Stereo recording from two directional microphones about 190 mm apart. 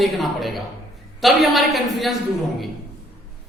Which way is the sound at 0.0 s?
Centre (ahead or behind).